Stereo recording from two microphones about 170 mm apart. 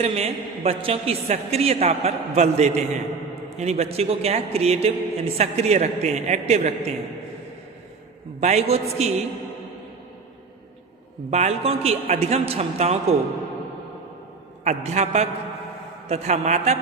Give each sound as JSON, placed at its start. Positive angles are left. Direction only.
{"t": 0.0, "sound": "a man's voice", "side_deg": -40}
{"t": 8.4, "sound": "a man's voice", "side_deg": -40}
{"t": 11.3, "sound": "a man's voice", "side_deg": -40}
{"t": 14.6, "sound": "a man's voice", "side_deg": -40}